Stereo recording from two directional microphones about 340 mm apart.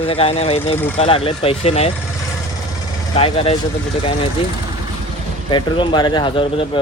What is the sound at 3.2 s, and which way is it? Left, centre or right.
Speech, centre.